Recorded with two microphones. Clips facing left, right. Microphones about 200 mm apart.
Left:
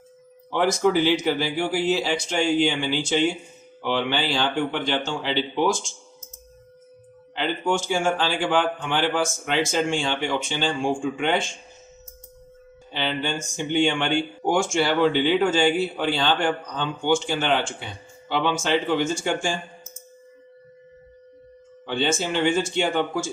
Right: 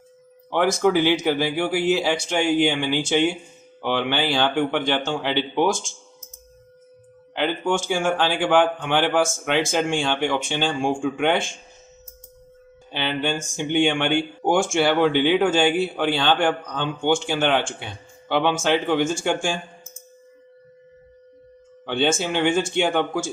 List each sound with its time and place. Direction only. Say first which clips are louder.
0.5 s a man's voice: right 1 dB; 60° right (ahead or behind)
7.9 s a man's voice: right 1 dB; 55° right (ahead or behind)
12.9 s a man's voice: right 2 dB; 60° right (ahead or behind)
21.8 s a man's voice: right 2 dB; 55° right (ahead or behind)